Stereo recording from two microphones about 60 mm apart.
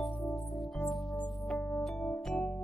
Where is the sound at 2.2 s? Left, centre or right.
Centre.